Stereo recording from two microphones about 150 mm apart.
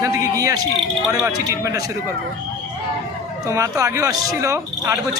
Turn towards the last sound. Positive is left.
turn(degrees=-20)  # may be behind; listen again after turning